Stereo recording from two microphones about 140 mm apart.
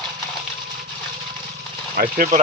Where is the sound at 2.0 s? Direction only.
75° right (ahead or behind).